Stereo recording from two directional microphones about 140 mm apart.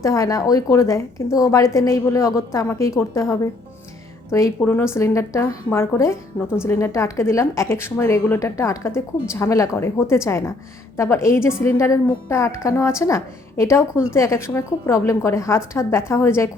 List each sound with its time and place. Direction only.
0.0 s a woman's voice: 25° left (ahead or behind)
4.3 s a woman's voice: 20° left (ahead or behind)